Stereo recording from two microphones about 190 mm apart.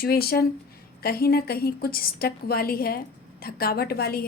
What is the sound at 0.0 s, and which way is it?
A woman's voice, 55° left (ahead or behind).